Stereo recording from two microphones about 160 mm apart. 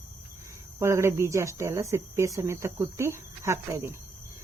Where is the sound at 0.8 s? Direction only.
15° right (ahead or behind).